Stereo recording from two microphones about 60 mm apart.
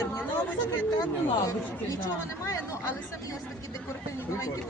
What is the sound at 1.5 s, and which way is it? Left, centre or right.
Speech, left.